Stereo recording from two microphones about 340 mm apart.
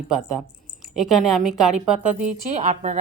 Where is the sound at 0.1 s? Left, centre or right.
Centre.